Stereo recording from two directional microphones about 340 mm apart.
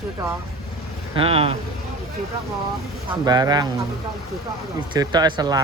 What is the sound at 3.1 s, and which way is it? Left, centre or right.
Speech, centre.